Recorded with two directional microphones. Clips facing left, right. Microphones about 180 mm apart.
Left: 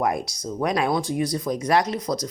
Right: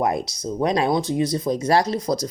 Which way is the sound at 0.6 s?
25° right (ahead or behind).